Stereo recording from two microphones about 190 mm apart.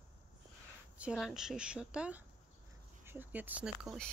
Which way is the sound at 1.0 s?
5° right (ahead or behind).